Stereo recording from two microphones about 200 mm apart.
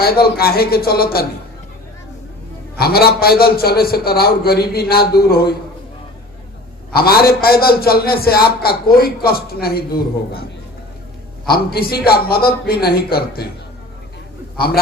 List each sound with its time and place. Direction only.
0.0 s a man's voice: 50° left (ahead or behind)
2.7 s a man's voice: 50° left (ahead or behind)
6.9 s a man's voice: 50° left (ahead or behind)
11.4 s a man's voice: 50° left (ahead or behind)